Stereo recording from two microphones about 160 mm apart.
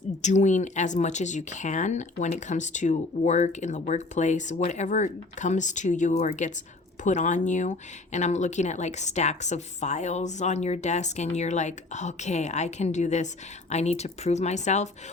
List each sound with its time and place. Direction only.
0.2 s speech: 50° left (ahead or behind)